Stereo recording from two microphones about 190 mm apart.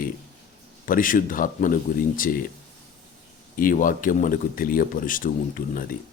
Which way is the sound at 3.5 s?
45° left (ahead or behind).